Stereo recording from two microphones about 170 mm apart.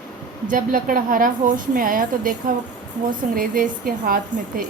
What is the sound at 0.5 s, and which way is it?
A woman's voice, 55° right (ahead or behind).